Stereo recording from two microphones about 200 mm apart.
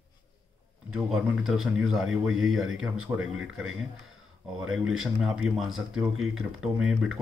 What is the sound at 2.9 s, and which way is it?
Speech, 90° right.